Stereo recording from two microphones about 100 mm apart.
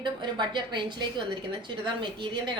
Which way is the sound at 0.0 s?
50° right (ahead or behind).